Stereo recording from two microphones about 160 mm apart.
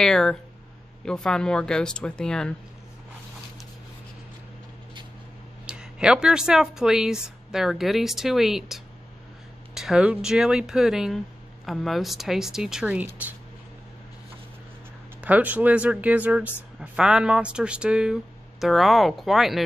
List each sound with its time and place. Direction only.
0.0 s speech: 5° left (ahead or behind)
5.7 s speech: 5° right (ahead or behind)
15.1 s speech: 10° right (ahead or behind)